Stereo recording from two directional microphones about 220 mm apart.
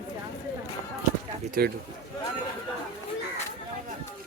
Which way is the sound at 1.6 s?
40° right (ahead or behind).